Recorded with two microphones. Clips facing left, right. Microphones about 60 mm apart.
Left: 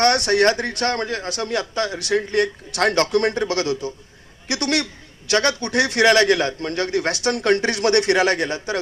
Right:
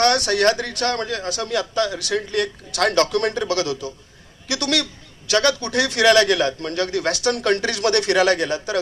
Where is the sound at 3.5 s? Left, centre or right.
Left.